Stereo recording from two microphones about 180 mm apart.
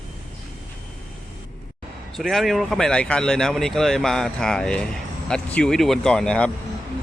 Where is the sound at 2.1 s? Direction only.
Centre (ahead or behind).